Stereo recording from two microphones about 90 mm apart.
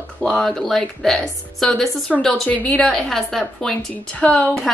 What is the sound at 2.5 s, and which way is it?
Speech, 15° left (ahead or behind).